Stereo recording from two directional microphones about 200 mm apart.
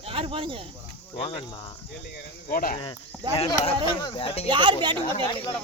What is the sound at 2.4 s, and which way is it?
Speech, 45° left (ahead or behind).